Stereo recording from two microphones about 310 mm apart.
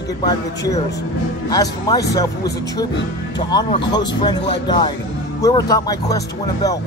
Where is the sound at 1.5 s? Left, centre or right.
Centre.